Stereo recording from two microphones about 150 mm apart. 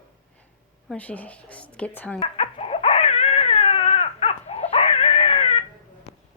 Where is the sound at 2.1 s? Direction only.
40° left (ahead or behind).